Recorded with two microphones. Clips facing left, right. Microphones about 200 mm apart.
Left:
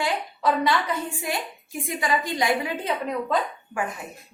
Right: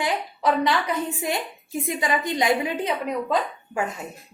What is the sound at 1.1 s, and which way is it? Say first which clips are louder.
A woman's voice: right 3 dB; 20° right (ahead or behind).